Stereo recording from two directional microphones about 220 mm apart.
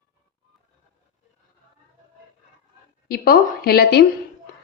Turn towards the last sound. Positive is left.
turn(degrees=45)  # may be behind; listen again after turning